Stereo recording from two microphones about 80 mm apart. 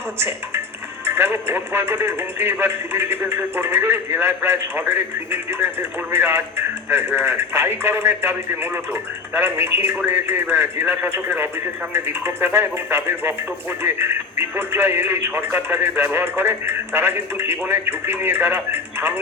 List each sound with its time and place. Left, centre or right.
0.2 s speech: right